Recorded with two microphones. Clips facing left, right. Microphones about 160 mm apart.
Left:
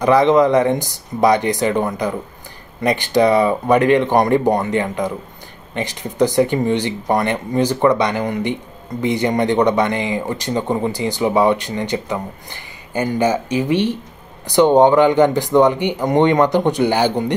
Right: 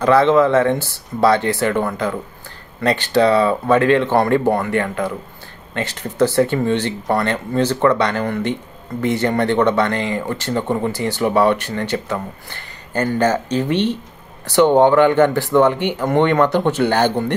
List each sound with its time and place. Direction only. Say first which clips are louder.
0.0 s speech: even; 15° left (ahead or behind)